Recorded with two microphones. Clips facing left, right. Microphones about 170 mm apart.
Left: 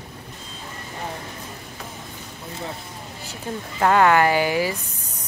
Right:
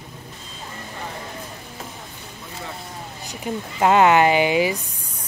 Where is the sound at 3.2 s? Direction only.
15° right (ahead or behind).